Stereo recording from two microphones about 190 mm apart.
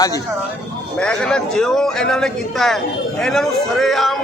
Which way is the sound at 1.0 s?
5° left (ahead or behind).